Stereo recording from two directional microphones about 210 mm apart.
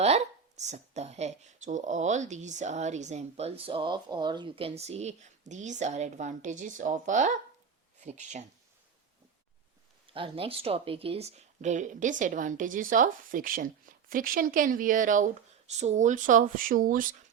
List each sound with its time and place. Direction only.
0.0 s speech: 30° right (ahead or behind)
10.1 s speech: 25° right (ahead or behind); by 17.1 s 40° right (ahead or behind)